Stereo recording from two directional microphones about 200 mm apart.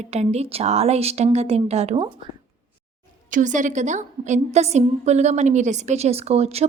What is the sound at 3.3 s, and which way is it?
A woman's voice, 40° right (ahead or behind).